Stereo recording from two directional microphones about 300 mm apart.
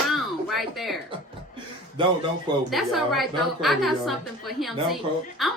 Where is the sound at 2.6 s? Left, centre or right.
Centre.